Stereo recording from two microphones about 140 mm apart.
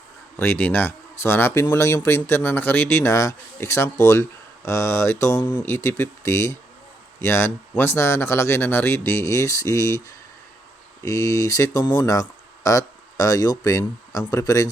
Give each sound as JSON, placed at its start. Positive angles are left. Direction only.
{"t": 0.3, "sound": "speech", "side_deg": 15}
{"t": 11.0, "sound": "speech", "side_deg": 20}